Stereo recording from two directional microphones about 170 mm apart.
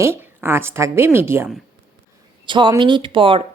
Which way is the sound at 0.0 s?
15° right (ahead or behind).